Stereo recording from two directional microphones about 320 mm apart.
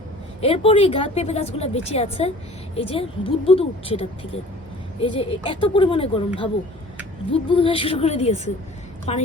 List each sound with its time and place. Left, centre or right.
0.4 s a woman's voice: centre